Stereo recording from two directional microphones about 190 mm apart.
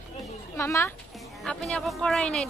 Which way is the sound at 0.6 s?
15° left (ahead or behind).